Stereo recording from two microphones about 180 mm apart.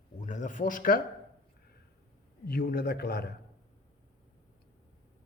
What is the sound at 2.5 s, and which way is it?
Speech, 55° left (ahead or behind).